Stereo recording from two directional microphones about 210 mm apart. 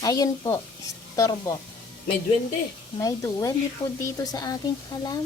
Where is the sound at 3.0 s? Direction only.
15° left (ahead or behind).